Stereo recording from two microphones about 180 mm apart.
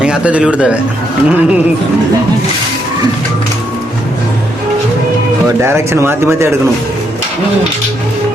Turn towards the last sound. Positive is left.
turn(degrees=-15)  # may be behind; listen again after turning